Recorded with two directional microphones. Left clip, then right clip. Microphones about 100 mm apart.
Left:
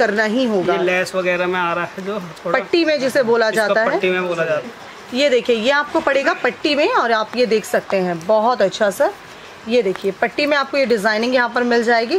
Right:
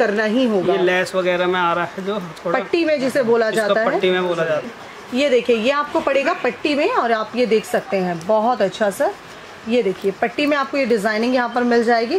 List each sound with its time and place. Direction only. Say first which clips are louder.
0.0 s a woman's voice: left 1 dB; 40° left (ahead or behind)
0.7 s speech: even; 5° right (ahead or behind)
2.5 s a woman's voice: left 2 dB; 45° left (ahead or behind)
4.0 s speech: even; 5° right (ahead or behind)
5.1 s a woman's voice: left 1 dB; 45° left (ahead or behind)